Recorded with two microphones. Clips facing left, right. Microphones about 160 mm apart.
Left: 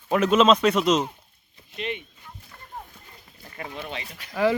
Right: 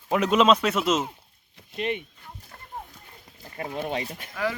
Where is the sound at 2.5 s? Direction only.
40° right (ahead or behind).